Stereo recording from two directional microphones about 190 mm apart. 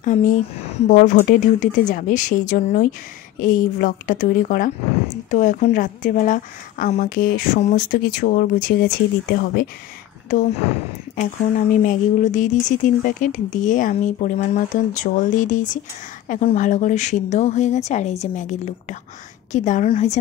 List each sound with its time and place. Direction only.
0.0 s a woman's voice: 40° left (ahead or behind)
10.3 s a woman's voice: 45° left (ahead or behind)